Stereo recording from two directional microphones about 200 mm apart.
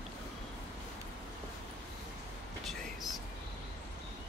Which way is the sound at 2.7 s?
Centre (ahead or behind).